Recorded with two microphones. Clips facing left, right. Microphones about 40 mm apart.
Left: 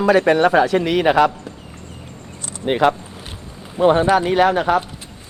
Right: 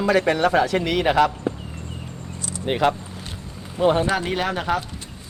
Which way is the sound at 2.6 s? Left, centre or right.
Left.